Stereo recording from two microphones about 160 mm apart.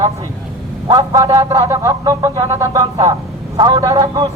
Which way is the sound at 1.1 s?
20° right (ahead or behind).